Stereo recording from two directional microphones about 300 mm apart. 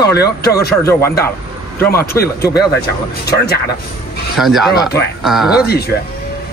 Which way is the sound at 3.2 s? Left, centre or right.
Left.